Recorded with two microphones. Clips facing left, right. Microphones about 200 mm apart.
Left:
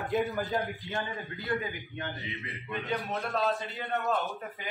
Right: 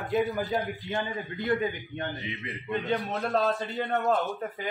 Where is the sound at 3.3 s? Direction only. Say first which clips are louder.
Right 4 dB; 40° right (ahead or behind).